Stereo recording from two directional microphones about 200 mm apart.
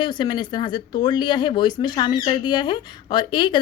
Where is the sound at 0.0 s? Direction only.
20° left (ahead or behind).